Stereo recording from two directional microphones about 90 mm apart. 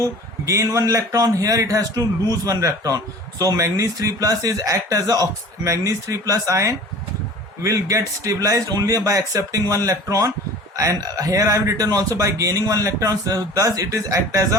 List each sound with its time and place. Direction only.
0.0 s a man's voice: 35° right (ahead or behind)